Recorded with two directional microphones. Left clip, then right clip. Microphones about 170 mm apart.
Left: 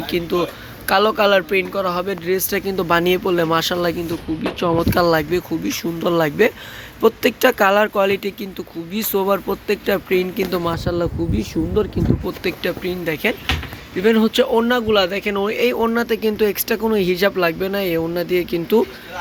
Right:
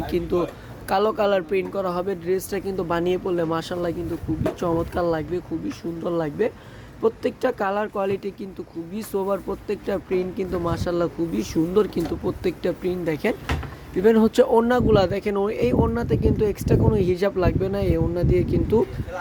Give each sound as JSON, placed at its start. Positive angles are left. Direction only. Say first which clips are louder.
{"t": 0.0, "sound": "speech", "louder": "left 3 dB", "side_deg": -10}
{"t": 12.4, "sound": "speech", "louder": "left 3 dB", "side_deg": -20}